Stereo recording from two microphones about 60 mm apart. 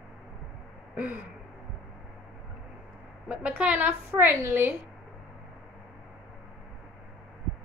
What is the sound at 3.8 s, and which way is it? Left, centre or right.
Speech, right.